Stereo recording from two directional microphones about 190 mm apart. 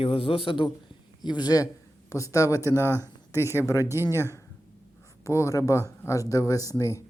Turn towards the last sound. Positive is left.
turn(degrees=15)  # may be behind; listen again after turning